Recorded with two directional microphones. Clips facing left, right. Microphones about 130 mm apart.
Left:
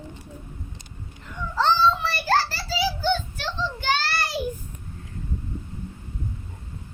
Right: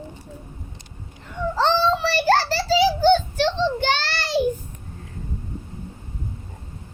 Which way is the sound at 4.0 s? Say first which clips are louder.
Right 4 dB; 90° right.